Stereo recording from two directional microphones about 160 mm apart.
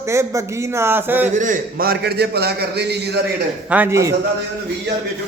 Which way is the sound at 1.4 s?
60° right (ahead or behind).